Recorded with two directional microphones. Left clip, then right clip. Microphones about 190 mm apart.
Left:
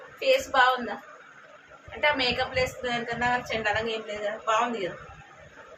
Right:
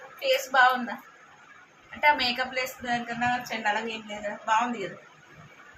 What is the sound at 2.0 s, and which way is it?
A woman's voice, centre (ahead or behind).